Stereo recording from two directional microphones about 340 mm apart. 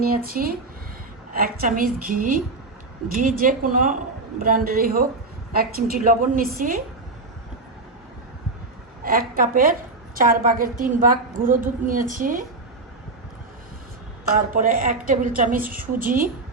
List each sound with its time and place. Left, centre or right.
0.0 s a woman's voice: right
9.0 s a woman's voice: right
14.3 s a woman's voice: right